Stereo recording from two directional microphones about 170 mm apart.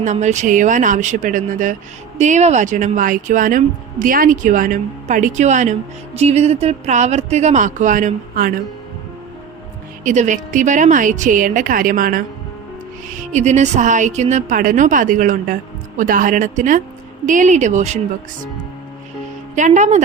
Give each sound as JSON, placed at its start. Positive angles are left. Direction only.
{"t": 0.0, "sound": "a woman's voice", "side_deg": -45}
{"t": 10.0, "sound": "a woman's voice", "side_deg": -45}
{"t": 13.3, "sound": "a woman's voice", "side_deg": -45}
{"t": 19.5, "sound": "a woman's voice", "side_deg": -45}